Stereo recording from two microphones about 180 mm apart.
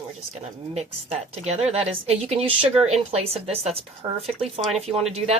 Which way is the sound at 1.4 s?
35° right (ahead or behind).